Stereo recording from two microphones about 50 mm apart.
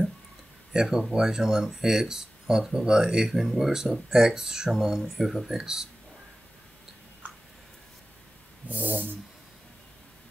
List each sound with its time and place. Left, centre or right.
0.7 s speech: centre
5.0 s speech: centre
8.6 s a sound: right